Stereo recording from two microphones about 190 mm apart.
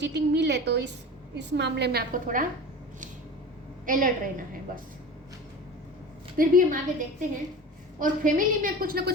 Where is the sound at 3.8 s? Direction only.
45° right (ahead or behind).